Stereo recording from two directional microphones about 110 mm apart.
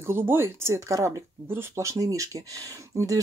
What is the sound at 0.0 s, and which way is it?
Speech, 20° right (ahead or behind).